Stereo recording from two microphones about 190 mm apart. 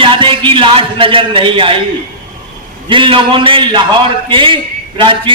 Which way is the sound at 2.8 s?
25° right (ahead or behind).